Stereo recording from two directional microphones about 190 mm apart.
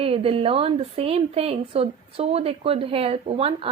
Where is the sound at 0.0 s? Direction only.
30° right (ahead or behind).